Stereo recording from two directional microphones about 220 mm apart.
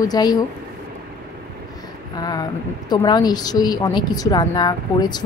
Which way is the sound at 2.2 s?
20° left (ahead or behind).